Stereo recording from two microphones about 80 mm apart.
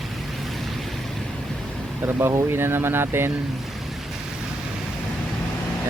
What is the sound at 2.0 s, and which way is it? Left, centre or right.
Speech, right.